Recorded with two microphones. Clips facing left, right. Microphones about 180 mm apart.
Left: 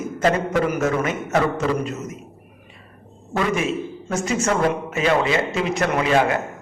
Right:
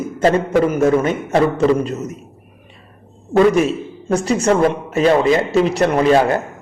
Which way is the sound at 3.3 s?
35° right (ahead or behind).